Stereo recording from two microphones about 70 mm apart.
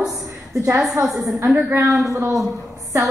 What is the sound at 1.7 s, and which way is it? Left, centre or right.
Speech, right.